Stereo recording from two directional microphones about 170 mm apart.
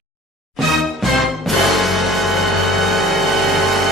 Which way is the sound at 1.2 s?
Centre (ahead or behind).